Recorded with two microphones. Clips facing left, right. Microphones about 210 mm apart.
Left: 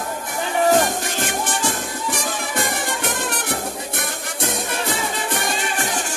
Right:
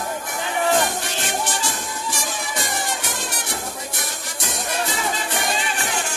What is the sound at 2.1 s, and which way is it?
Music, 60° left (ahead or behind).